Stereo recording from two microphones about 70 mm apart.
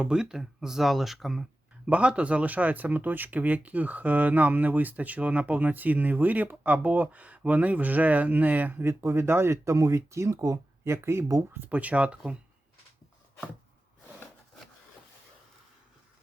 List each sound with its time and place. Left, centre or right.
0.0 s speech: centre
1.9 s speech: centre
8.8 s speech: right
11.7 s speech: right